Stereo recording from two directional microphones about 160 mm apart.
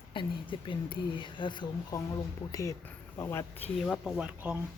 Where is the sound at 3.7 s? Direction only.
Centre (ahead or behind).